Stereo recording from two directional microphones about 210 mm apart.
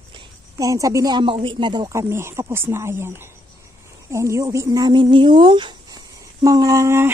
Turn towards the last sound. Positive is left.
turn(degrees=-15)  # may be behind; listen again after turning